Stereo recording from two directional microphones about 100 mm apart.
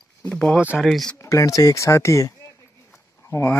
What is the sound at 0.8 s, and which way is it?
Speech, centre (ahead or behind).